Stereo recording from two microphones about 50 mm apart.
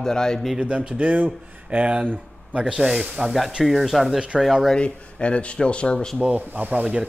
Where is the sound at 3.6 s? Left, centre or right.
Centre.